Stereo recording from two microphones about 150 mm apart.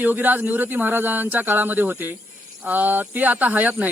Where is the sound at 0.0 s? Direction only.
10° right (ahead or behind).